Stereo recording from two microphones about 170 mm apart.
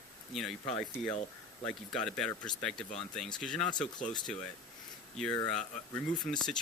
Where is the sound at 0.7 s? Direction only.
5° left (ahead or behind).